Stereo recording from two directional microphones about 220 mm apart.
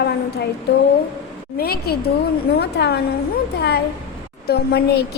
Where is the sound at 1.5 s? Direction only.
45° left (ahead or behind).